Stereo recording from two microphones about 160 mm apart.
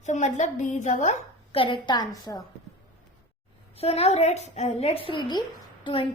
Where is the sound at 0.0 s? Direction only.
45° left (ahead or behind).